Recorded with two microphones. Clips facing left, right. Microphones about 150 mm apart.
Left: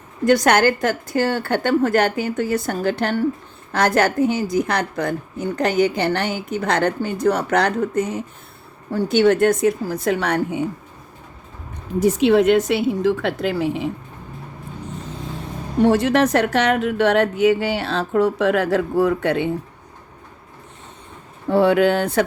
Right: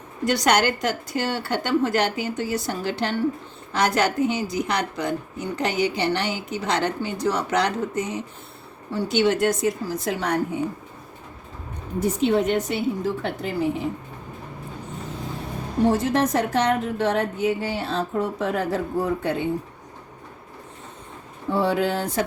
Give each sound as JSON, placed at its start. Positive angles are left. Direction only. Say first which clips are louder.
{"t": 0.3, "sound": "a woman's voice", "louder": "left 5 dB", "side_deg": 50}
{"t": 11.9, "sound": "a woman's voice", "louder": "left 6 dB", "side_deg": 90}
{"t": 15.8, "sound": "a woman's voice", "louder": "left 5 dB", "side_deg": 75}
{"t": 21.5, "sound": "a woman's voice", "louder": "left 7 dB", "side_deg": 65}